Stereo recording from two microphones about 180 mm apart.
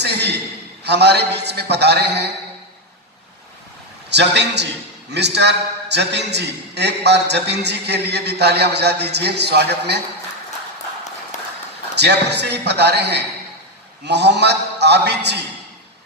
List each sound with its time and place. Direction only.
0.0 s a sound: 70° right (ahead or behind)
0.8 s a man's voice: 65° right (ahead or behind)
4.1 s a man's voice: 70° right (ahead or behind)
11.3 s run: 40° left (ahead or behind)
11.9 s a man's voice: 70° right (ahead or behind)